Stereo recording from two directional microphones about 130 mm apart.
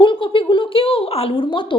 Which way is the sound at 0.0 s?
40° left (ahead or behind).